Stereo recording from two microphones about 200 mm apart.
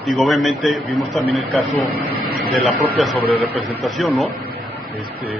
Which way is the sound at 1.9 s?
50° right (ahead or behind).